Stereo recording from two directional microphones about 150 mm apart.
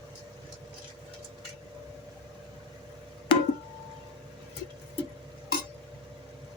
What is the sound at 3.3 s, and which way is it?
Music, 30° left (ahead or behind).